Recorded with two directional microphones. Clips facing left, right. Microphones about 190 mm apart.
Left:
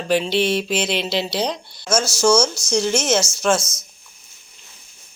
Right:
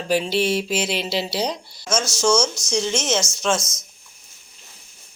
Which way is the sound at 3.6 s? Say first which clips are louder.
Left 2 dB; 35° left (ahead or behind).